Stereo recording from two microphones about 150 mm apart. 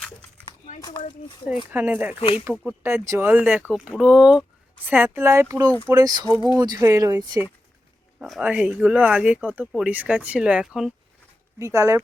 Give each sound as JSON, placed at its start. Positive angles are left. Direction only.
{"t": 0.8, "sound": "speech", "side_deg": 25}
{"t": 1.7, "sound": "speech", "side_deg": -10}
{"t": 2.1, "sound": "speech", "side_deg": 40}
{"t": 2.4, "sound": "speech", "side_deg": -15}
{"t": 8.2, "sound": "speech", "side_deg": -5}
{"t": 11.6, "sound": "speech", "side_deg": -20}